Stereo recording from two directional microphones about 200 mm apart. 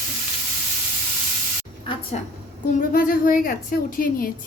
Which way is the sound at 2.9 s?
45° left (ahead or behind).